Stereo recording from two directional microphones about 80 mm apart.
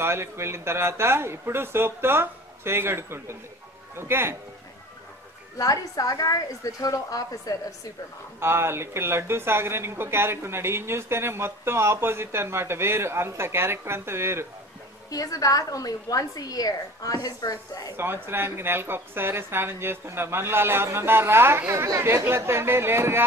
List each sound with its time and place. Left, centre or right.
0.0 s a woman's voice: right
5.6 s a woman's voice: left
8.4 s a woman's voice: right
15.0 s a woman's voice: left
17.9 s speech: right